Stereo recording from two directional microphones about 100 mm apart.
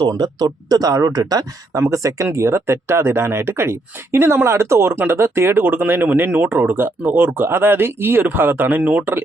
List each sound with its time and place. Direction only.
0.1 s speech: 45° right (ahead or behind); by 9.2 s 15° right (ahead or behind)